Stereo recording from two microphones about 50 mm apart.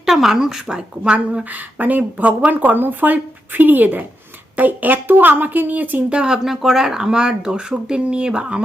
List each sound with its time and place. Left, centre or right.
0.0 s speech: centre
1.5 s speech: right
6.1 s speech: centre